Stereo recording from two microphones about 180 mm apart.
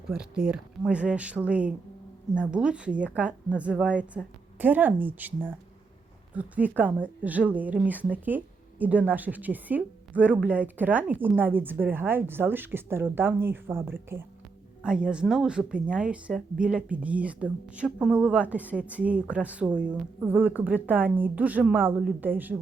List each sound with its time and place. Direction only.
0.1 s a woman's voice: 5° right (ahead or behind)
6.7 s a woman's voice: 10° right (ahead or behind)